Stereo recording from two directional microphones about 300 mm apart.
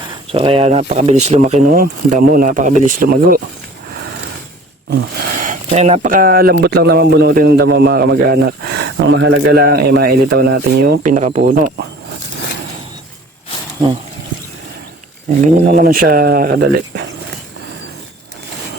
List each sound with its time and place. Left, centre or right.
0.3 s speech: centre
5.4 s speech: right
13.7 s speech: centre
15.4 s speech: right